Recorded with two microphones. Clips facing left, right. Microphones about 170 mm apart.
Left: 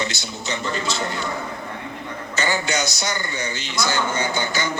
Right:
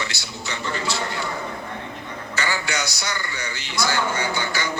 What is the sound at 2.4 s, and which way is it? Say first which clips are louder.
A man's voice: left 4 dB; 20° left (ahead or behind).